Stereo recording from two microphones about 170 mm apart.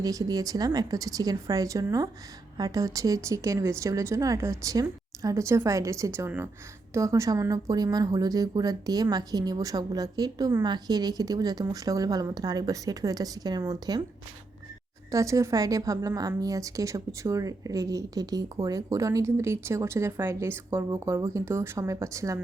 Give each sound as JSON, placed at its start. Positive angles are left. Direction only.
{"t": 0.0, "sound": "a woman's voice", "side_deg": -20}
{"t": 15.1, "sound": "a woman's voice", "side_deg": -20}